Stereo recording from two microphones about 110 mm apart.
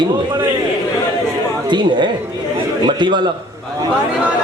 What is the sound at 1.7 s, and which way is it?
A man's voice, 45° right (ahead or behind).